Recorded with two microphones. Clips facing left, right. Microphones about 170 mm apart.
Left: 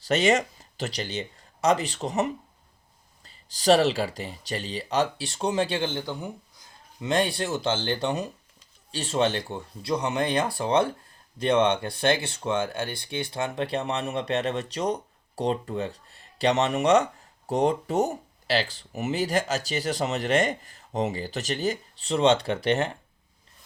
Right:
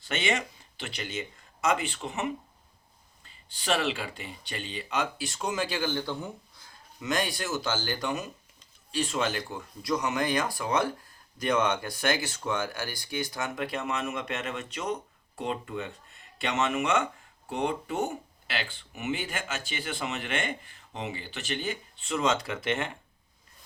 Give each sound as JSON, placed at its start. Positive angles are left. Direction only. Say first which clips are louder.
{"t": 0.0, "sound": "speech", "louder": "left 8 dB", "side_deg": 40}
{"t": 7.0, "sound": "speech", "louder": "left 5 dB", "side_deg": 30}